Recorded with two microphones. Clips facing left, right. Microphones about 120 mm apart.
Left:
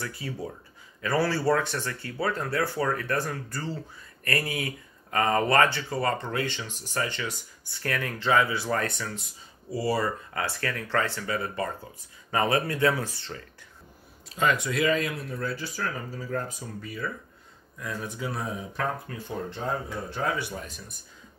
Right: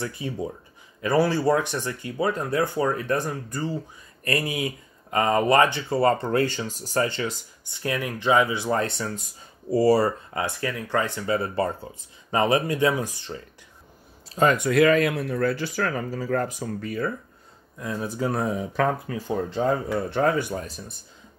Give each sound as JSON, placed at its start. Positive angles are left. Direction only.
{"t": 0.0, "sound": "speech", "side_deg": -20}
{"t": 7.6, "sound": "speech", "side_deg": -20}
{"t": 9.7, "sound": "speech", "side_deg": -40}
{"t": 10.3, "sound": "speech", "side_deg": -20}
{"t": 11.3, "sound": "speech", "side_deg": -35}
{"t": 14.3, "sound": "speech", "side_deg": -40}
{"t": 17.7, "sound": "speech", "side_deg": -30}
{"t": 18.3, "sound": "speech", "side_deg": -75}